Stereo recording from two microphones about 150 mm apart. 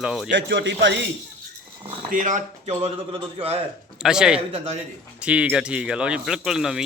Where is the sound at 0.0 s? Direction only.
5° right (ahead or behind).